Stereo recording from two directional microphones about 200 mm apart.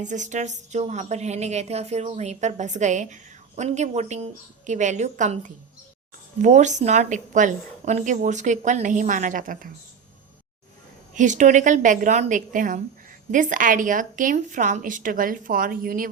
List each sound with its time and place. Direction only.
0.0 s speech: 35° right (ahead or behind)
11.1 s speech: 40° right (ahead or behind)